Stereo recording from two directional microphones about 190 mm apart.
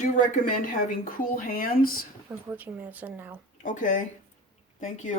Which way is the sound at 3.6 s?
40° left (ahead or behind).